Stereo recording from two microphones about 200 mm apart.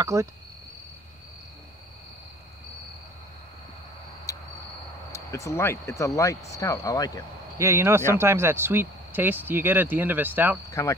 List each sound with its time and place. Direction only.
0.0 s speech: 15° right (ahead or behind)
5.1 s speech: 15° left (ahead or behind)
7.5 s speech: 15° right (ahead or behind)
10.7 s speech: 15° left (ahead or behind)